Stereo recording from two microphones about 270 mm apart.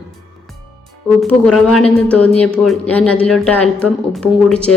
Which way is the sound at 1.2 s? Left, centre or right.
Centre.